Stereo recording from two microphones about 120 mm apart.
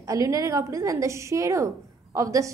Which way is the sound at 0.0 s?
30° right (ahead or behind).